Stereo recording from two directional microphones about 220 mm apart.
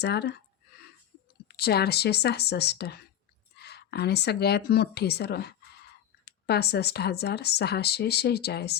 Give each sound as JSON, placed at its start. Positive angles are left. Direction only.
{"t": 0.0, "sound": "speech", "side_deg": 50}
{"t": 1.5, "sound": "a woman's voice", "side_deg": 45}